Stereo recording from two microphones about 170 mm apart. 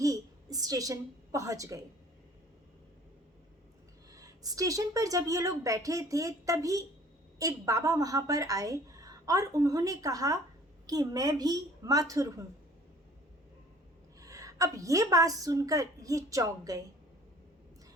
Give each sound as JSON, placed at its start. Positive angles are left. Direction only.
{"t": 0.0, "sound": "a sound", "side_deg": -20}
{"t": 4.1, "sound": "a woman's voice", "side_deg": -20}
{"t": 14.2, "sound": "a woman's voice", "side_deg": -20}